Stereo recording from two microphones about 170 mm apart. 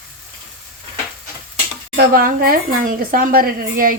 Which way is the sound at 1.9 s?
60° right (ahead or behind).